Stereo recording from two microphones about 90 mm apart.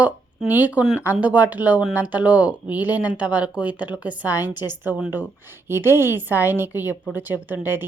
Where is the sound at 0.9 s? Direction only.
20° right (ahead or behind).